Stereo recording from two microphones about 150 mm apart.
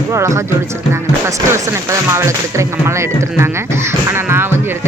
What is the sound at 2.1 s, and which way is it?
Speech, 20° right (ahead or behind).